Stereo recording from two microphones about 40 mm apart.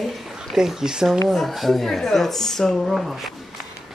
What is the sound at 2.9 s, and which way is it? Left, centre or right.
Speech, centre.